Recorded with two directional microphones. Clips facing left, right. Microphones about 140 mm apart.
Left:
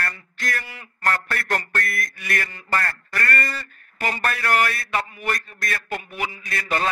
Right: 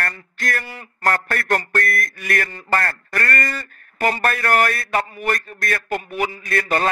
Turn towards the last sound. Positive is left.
turn(degrees=-50)  # may be behind; listen again after turning